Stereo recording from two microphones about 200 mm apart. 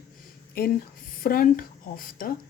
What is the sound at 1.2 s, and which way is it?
Speech, 45° left (ahead or behind).